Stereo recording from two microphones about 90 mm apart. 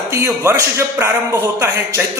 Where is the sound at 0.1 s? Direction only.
30° right (ahead or behind).